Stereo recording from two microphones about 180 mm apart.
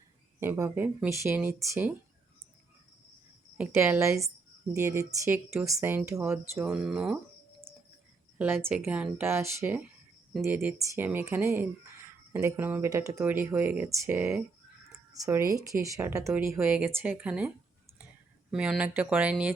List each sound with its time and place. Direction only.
0.3 s speech: 15° right (ahead or behind)
3.6 s speech: 10° right (ahead or behind)
6.7 s speech: 5° right (ahead or behind)
8.4 s speech: 10° right (ahead or behind)
18.5 s speech: 5° right (ahead or behind)